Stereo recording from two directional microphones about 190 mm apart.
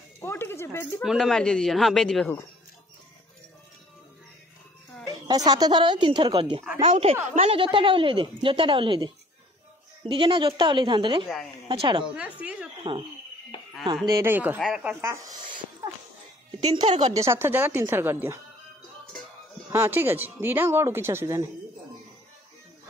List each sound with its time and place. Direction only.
0.2 s a sound: 10° left (ahead or behind)
1.0 s a man's voice: centre (ahead or behind)
5.0 s a woman's voice: 20° right (ahead or behind)
12.2 s speech: 5° right (ahead or behind)
12.9 s a woman's voice: 25° right (ahead or behind)
14.0 s speech: 15° right (ahead or behind)
16.8 s speech: 40° right (ahead or behind)
17.1 s speech: 15° right (ahead or behind)
19.7 s speech: 10° right (ahead or behind)